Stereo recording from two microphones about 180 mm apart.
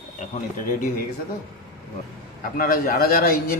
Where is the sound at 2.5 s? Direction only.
55° left (ahead or behind).